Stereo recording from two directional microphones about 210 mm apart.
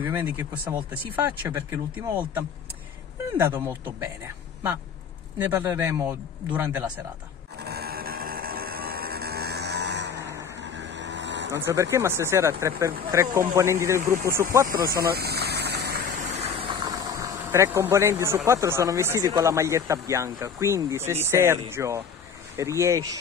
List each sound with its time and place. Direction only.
0.0 s speech: 10° right (ahead or behind)
5.5 s speech: 10° right (ahead or behind)
7.6 s music: 50° right (ahead or behind)
10.2 s vehicle: 55° right (ahead or behind)
11.5 s speech: 15° right (ahead or behind)
15.0 s a sound: 50° right (ahead or behind)
16.3 s speech: 25° right (ahead or behind)